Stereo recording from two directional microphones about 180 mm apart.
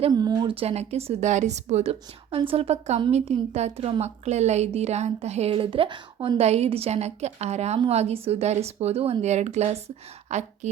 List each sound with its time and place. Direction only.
0.0 s a woman's voice: 20° right (ahead or behind); by 10.7 s 40° right (ahead or behind)